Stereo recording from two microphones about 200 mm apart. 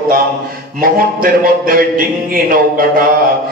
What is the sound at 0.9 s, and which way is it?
Speech, 45° right (ahead or behind).